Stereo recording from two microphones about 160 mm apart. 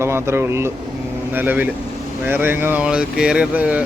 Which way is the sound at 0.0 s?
15° right (ahead or behind).